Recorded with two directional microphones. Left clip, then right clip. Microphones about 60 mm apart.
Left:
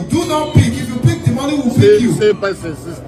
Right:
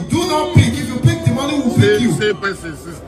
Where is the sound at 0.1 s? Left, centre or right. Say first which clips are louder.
Even; centre.